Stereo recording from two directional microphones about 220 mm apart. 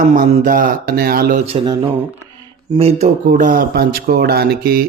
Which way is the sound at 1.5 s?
20° right (ahead or behind).